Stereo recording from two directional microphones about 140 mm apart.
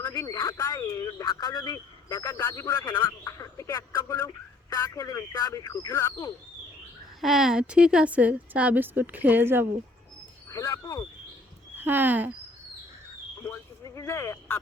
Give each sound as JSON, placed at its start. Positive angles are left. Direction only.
{"t": 0.0, "sound": "a man's voice", "side_deg": 20}
{"t": 7.2, "sound": "a woman's voice", "side_deg": 0}
{"t": 10.5, "sound": "a man's voice", "side_deg": 25}
{"t": 11.8, "sound": "a woman's voice", "side_deg": -15}
{"t": 13.4, "sound": "speech", "side_deg": 20}